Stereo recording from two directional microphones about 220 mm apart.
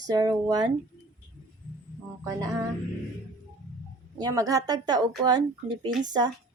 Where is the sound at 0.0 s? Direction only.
15° right (ahead or behind).